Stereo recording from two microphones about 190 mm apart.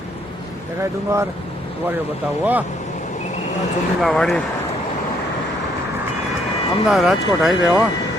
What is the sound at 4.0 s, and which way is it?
Speech, centre (ahead or behind).